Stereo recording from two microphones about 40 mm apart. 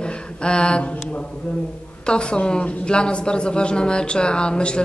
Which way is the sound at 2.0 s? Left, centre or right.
Left.